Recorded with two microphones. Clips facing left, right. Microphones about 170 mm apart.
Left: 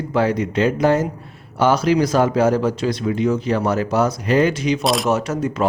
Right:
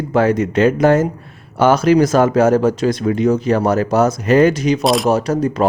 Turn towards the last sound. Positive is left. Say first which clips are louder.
# right 4 dB
turn(degrees=-35)  # may be behind; listen again after turning